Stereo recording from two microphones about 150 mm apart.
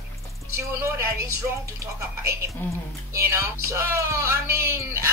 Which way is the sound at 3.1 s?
20° right (ahead or behind).